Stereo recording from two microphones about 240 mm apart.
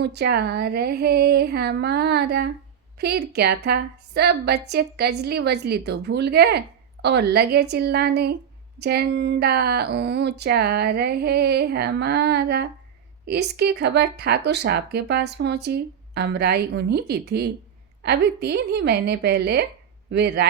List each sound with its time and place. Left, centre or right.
0.0 s speech: right